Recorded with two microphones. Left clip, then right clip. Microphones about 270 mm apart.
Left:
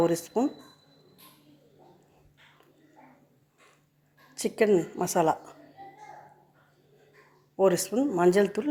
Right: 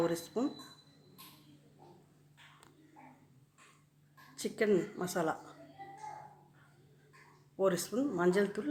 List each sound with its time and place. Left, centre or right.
0.0 s a woman's voice: left
4.4 s a woman's voice: left
7.5 s a woman's voice: left